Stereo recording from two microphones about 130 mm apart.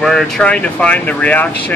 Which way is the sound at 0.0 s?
5° left (ahead or behind).